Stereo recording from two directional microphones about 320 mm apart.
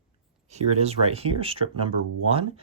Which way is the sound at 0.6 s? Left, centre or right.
Centre.